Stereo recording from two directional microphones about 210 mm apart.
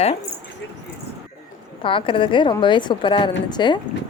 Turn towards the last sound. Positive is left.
turn(degrees=20)  # may be behind; listen again after turning